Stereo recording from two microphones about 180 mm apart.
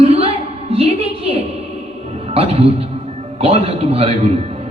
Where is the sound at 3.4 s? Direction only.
30° right (ahead or behind).